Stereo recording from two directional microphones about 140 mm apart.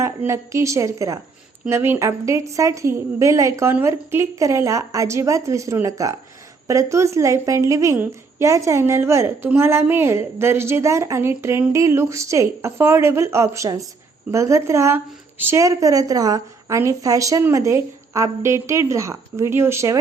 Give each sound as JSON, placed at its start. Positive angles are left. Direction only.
{"t": 0.0, "sound": "a woman's voice", "side_deg": -20}